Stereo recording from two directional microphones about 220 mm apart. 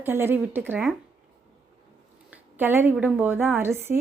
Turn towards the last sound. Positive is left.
turn(degrees=-10)  # may be behind; listen again after turning